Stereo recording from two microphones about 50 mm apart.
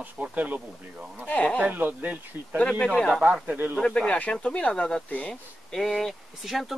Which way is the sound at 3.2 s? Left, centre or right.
Right.